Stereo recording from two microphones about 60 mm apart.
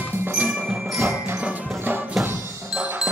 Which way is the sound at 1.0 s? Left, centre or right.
Right.